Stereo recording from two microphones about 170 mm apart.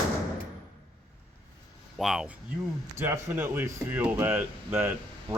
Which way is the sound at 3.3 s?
10° right (ahead or behind).